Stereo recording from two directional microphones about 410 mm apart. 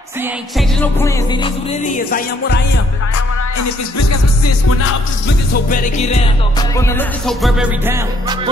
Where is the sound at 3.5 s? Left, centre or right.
Left.